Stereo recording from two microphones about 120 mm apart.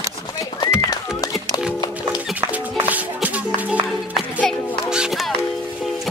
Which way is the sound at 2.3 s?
15° right (ahead or behind).